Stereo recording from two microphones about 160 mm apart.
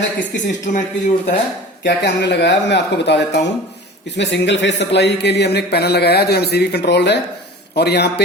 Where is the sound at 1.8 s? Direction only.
90° left.